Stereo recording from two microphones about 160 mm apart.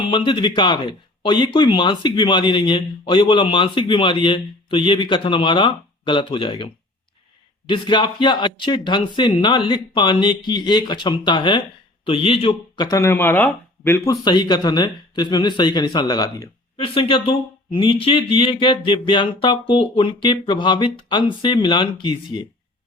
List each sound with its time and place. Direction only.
0.1 s speech: 30° left (ahead or behind)
7.7 s speech: 30° left (ahead or behind)